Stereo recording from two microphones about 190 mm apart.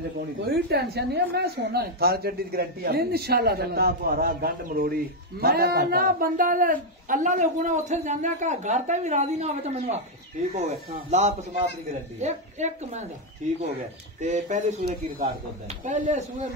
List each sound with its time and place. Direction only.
0.5 s a woman's voice: 55° right (ahead or behind); by 16.4 s 40° right (ahead or behind)